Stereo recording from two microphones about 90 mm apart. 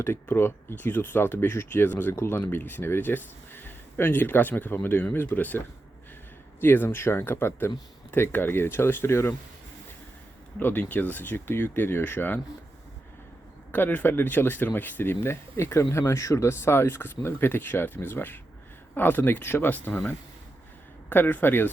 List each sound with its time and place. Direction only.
0.0 s speech: 25° left (ahead or behind)
10.6 s speech: 20° left (ahead or behind)
13.7 s speech: 20° left (ahead or behind)